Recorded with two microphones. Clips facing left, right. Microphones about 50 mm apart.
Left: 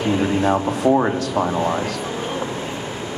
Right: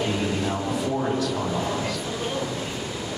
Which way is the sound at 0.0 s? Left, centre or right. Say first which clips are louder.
Left 6 dB; left.